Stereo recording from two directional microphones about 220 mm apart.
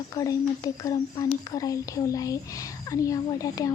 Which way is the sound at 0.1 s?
15° left (ahead or behind).